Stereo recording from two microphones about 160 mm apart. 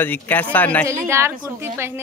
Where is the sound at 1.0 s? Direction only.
15° right (ahead or behind).